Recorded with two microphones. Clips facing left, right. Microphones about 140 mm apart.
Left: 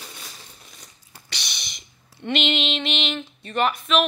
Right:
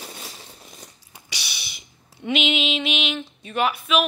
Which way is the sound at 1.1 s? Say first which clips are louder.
Left 1 dB; 10° right (ahead or behind).